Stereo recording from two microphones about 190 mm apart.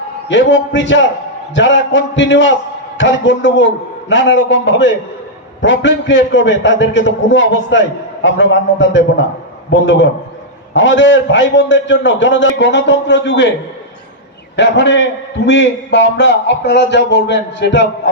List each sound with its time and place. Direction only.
0.3 s a man's voice: 70° left (ahead or behind)
14.5 s a man's voice: 70° left (ahead or behind)